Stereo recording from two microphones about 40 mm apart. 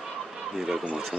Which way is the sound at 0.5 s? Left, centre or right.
Centre.